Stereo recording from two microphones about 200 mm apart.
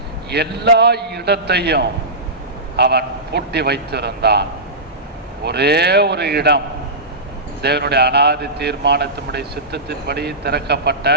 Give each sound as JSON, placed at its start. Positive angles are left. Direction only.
{"t": 0.3, "sound": "a man's voice", "side_deg": -55}
{"t": 5.5, "sound": "a man's voice", "side_deg": -55}
{"t": 7.6, "sound": "a man's voice", "side_deg": -55}